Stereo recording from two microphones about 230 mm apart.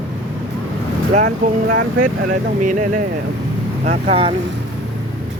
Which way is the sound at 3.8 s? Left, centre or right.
Right.